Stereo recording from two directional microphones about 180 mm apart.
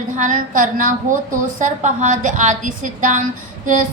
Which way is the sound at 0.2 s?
45° right (ahead or behind).